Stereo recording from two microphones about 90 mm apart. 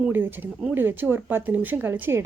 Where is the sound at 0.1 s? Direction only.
20° right (ahead or behind).